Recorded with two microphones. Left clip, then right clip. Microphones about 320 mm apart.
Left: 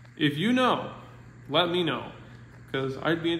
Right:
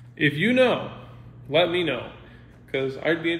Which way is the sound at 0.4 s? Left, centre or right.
Centre.